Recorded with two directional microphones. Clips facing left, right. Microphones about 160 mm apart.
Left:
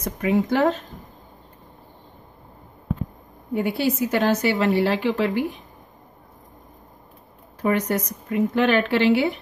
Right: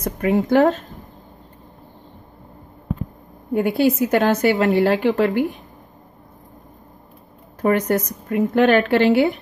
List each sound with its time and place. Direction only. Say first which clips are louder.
0.0 s a woman's voice: right 2 dB; 50° right (ahead or behind)
3.5 s a woman's voice: right 5 dB; 50° right (ahead or behind)
7.6 s a woman's voice: right 4 dB; 50° right (ahead or behind)